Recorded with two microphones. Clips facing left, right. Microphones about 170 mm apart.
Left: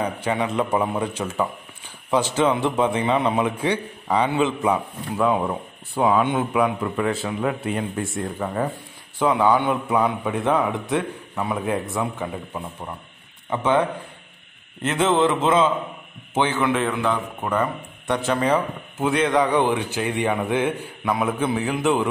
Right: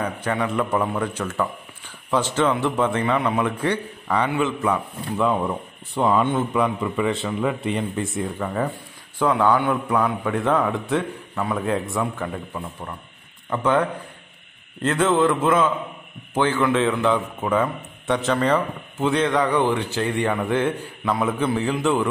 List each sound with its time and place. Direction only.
0.0 s a man's voice: 15° left (ahead or behind)
5.2 s speech: 5° left (ahead or behind)
9.2 s a man's voice: 15° left (ahead or behind)
14.9 s a man's voice: 20° left (ahead or behind)